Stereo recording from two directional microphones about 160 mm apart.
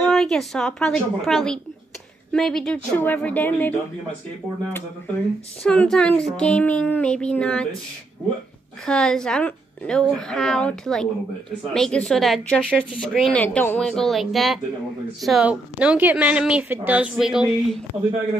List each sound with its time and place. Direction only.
0.0 s a woman's voice: 5° left (ahead or behind)
5.6 s a child's voice: 5° left (ahead or behind)
8.8 s a woman's voice: 5° left (ahead or behind)